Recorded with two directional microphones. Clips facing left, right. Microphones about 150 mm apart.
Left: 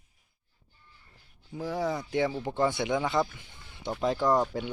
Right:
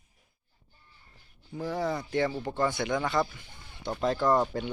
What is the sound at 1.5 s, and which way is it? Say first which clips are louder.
Speech: even; 5° left (ahead or behind).